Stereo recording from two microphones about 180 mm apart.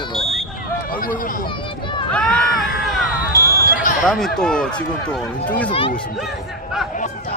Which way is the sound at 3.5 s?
55° left (ahead or behind).